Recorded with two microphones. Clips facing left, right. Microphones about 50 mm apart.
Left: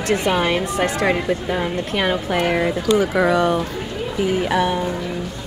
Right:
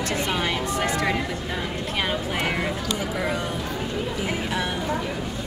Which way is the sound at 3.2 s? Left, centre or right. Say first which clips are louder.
Left 10 dB; left.